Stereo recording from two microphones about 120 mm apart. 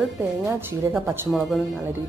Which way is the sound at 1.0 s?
20° right (ahead or behind).